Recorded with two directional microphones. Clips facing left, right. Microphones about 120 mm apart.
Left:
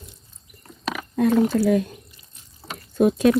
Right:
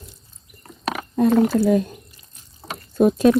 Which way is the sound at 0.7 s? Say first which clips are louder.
Right 3 dB; 50° right (ahead or behind).